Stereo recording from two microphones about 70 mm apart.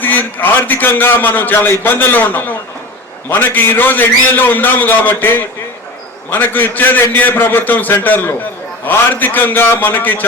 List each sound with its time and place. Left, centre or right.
0.0 s a man's voice: left